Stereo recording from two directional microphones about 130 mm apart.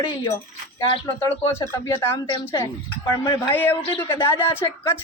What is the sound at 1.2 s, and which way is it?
Speech, 20° left (ahead or behind).